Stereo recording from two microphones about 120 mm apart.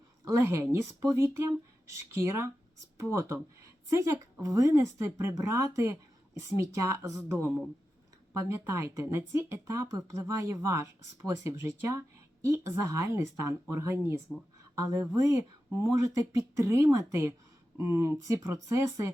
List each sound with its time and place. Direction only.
0.3 s speech: 25° right (ahead or behind)